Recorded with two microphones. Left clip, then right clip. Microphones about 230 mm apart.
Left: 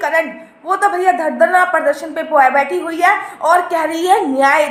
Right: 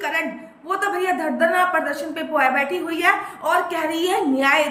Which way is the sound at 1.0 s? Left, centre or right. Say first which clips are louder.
Left 5 dB; centre.